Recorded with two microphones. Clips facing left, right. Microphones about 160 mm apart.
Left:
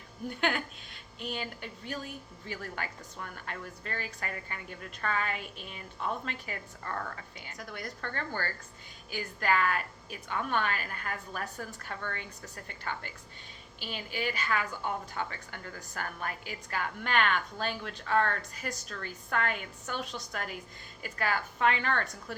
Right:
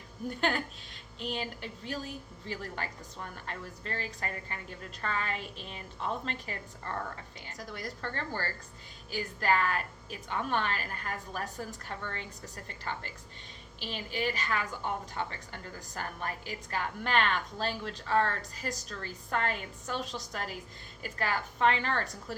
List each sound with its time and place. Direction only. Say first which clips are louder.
0.3 s a woman's voice: even; 35° right (ahead or behind)
7.5 s a woman's voice: right 1 dB; 40° right (ahead or behind)
14.7 s a woman's voice: even; centre (ahead or behind)
15.1 s a woman's voice: even; 30° right (ahead or behind)
20.0 s a woman's voice: left 1 dB; centre (ahead or behind)
21.0 s a woman's voice: left 1 dB; 35° right (ahead or behind)